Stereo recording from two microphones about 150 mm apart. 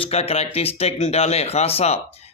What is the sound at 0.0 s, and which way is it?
Speech, 40° left (ahead or behind).